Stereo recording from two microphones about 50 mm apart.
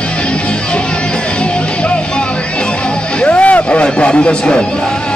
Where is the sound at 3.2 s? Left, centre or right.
Left.